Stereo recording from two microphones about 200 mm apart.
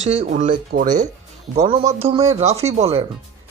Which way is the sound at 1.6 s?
30° right (ahead or behind).